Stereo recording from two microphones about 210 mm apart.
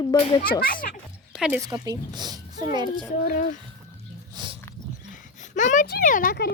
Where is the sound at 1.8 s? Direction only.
20° right (ahead or behind).